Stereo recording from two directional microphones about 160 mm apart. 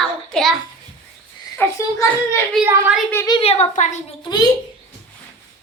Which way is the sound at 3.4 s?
40° left (ahead or behind).